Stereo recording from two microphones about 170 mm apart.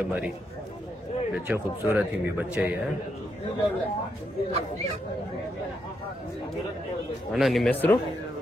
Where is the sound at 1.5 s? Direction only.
10° right (ahead or behind).